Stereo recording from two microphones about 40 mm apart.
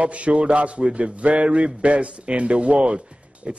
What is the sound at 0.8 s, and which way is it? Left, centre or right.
Speech, centre.